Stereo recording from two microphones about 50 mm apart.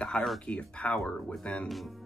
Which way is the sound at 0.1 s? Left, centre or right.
Centre.